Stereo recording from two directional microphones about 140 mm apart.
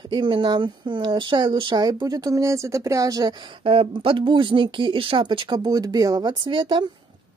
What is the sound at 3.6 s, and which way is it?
Speech, 40° right (ahead or behind).